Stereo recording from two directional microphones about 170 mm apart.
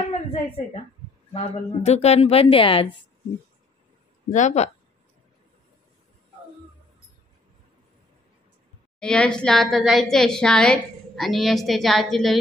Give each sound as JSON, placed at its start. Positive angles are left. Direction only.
{"t": 1.3, "sound": "a woman's voice", "side_deg": 40}
{"t": 4.3, "sound": "speech", "side_deg": 45}
{"t": 9.0, "sound": "a woman's voice", "side_deg": 5}